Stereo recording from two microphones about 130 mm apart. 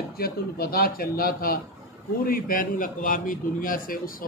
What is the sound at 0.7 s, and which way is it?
A man's voice, 90° left.